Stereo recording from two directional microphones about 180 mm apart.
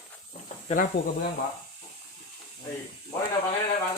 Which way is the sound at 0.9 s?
55° left (ahead or behind).